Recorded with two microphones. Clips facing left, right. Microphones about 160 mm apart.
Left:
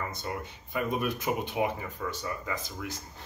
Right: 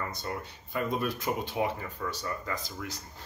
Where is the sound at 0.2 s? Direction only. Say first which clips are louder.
Left 1 dB; 15° left (ahead or behind).